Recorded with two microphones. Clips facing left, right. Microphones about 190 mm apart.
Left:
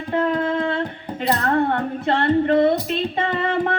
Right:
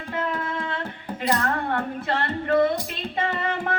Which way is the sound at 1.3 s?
30° left (ahead or behind).